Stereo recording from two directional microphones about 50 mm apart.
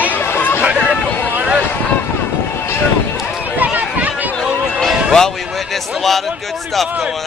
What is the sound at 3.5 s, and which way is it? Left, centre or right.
Run, right.